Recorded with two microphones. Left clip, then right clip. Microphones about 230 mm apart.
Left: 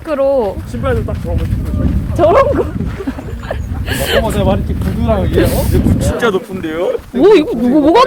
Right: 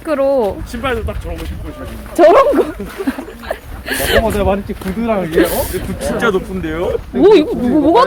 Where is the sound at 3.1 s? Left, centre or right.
Centre.